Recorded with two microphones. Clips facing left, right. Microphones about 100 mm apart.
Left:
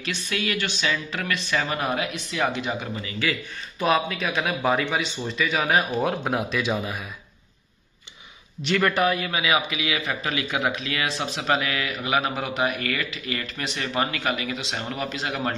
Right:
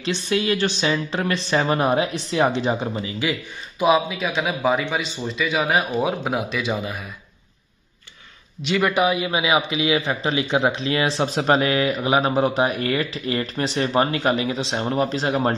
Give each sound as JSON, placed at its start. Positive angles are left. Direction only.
{"t": 0.0, "sound": "a man's voice", "side_deg": -30}
{"t": 3.8, "sound": "speech", "side_deg": -10}
{"t": 8.6, "sound": "a man's voice", "side_deg": -10}